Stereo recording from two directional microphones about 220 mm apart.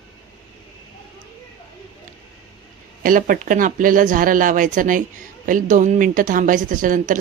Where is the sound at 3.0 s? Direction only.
40° right (ahead or behind).